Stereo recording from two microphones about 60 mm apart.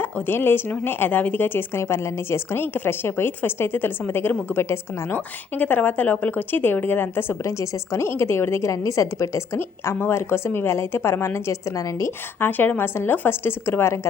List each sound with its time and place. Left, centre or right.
0.0 s a woman's voice: left
7.4 s a woman's voice: left
8.7 s a woman's voice: left
9.6 s a woman's voice: left
11.8 s a woman's voice: left
12.4 s a woman's voice: left